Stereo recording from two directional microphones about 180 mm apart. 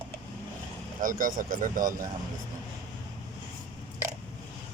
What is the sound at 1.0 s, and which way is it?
Speech, 50° right (ahead or behind).